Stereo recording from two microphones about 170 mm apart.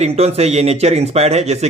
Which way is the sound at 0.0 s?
35° right (ahead or behind).